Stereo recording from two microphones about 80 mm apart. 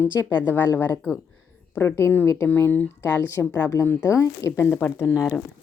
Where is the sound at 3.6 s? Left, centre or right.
Left.